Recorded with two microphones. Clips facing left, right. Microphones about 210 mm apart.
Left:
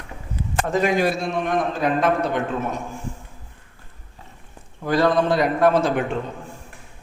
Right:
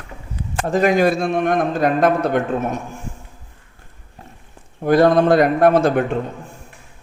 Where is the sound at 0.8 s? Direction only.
50° right (ahead or behind).